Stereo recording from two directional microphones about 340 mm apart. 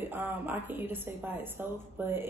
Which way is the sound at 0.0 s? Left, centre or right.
Centre.